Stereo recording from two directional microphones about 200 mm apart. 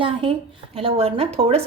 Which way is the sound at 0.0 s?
25° right (ahead or behind).